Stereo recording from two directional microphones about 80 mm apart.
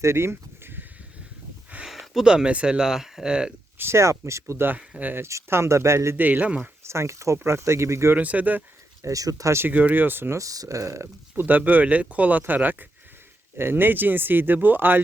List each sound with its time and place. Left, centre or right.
0.0 s a sound: right
1.9 s speech: centre
3.8 s speech: right
5.2 s speech: right
6.1 s speech: right
6.8 s speech: right
8.1 s speech: centre
9.0 s speech: right
9.6 s speech: right
10.3 s speech: right
11.3 s speech: right